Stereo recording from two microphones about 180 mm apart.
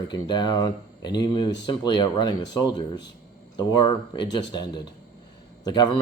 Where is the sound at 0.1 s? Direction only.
25° left (ahead or behind).